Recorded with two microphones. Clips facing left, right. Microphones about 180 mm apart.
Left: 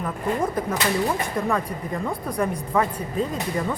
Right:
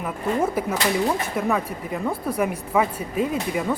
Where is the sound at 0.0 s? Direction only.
10° right (ahead or behind).